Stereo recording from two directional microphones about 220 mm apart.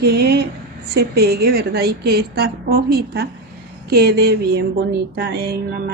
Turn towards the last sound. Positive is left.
turn(degrees=-45)  # may be behind; listen again after turning